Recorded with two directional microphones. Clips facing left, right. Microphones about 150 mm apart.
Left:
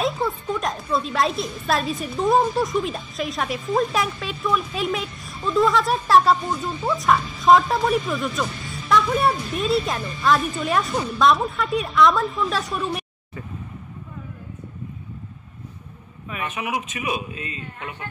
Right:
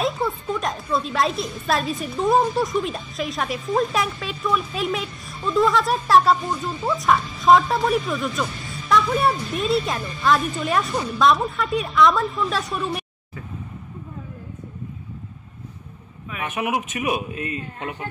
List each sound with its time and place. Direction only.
0.0 s a sound: centre (ahead or behind)
0.9 s a woman's voice: centre (ahead or behind)
16.4 s speech: 55° right (ahead or behind)